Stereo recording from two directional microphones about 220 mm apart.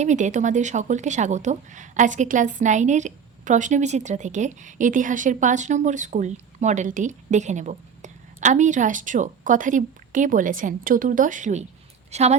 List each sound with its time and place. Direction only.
0.0 s a woman's voice: 35° right (ahead or behind)